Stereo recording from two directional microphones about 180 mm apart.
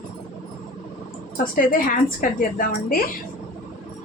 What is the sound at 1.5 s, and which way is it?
Speech, 50° left (ahead or behind).